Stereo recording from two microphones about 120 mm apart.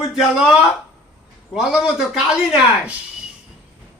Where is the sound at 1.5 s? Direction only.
5° right (ahead or behind).